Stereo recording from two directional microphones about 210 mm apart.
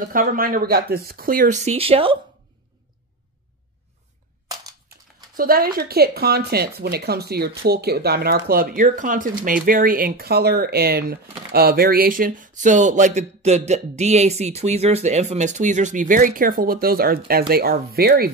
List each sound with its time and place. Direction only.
0.1 s speech: 40° right (ahead or behind)
4.8 s speech: 45° right (ahead or behind)